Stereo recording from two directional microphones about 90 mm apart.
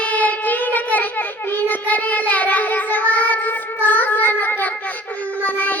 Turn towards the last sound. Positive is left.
turn(degrees=20)  # may be behind; listen again after turning